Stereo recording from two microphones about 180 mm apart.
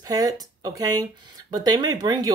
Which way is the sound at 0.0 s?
20° right (ahead or behind).